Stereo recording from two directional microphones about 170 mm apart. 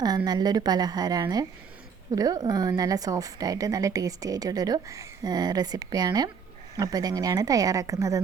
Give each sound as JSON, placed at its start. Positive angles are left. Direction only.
{"t": 0.3, "sound": "a woman's voice", "side_deg": -25}